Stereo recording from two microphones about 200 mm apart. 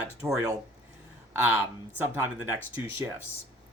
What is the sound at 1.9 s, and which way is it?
Speech, 10° right (ahead or behind).